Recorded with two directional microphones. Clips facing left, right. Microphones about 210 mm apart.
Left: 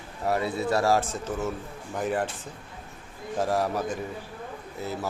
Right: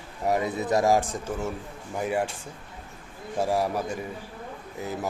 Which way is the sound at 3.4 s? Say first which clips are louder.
Right 1 dB; 10° right (ahead or behind).